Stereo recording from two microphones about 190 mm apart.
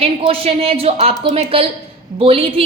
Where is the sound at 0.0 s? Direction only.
30° right (ahead or behind).